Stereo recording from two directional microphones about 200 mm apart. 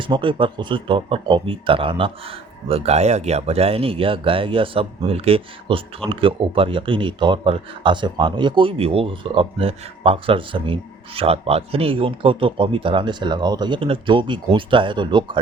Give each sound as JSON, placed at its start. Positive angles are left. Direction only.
{"t": 0.0, "sound": "speech", "side_deg": -25}